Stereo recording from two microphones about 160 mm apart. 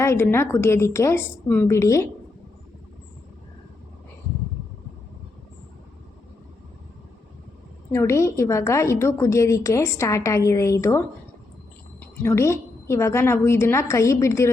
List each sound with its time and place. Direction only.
0.0 s a woman's voice: 15° left (ahead or behind)
7.9 s a woman's voice: 15° left (ahead or behind)